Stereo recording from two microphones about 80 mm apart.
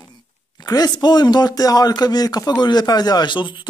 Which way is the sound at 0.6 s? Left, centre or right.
Left.